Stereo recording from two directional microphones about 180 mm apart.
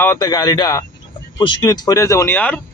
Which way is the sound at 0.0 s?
20° left (ahead or behind).